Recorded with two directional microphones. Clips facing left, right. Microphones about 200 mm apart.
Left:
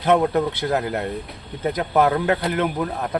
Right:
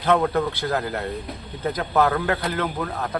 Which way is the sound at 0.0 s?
20° left (ahead or behind).